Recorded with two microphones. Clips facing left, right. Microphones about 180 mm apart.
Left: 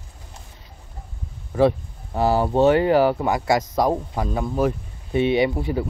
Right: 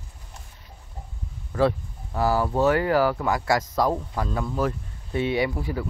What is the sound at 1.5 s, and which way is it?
Speech, 15° left (ahead or behind).